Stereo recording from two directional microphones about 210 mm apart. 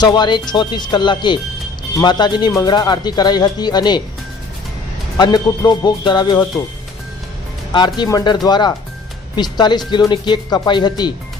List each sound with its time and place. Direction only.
0.0 s speech: 20° left (ahead or behind)
5.1 s speech: 20° left (ahead or behind)
7.7 s speech: 20° left (ahead or behind)